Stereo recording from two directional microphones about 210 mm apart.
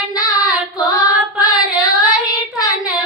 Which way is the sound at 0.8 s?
15° left (ahead or behind).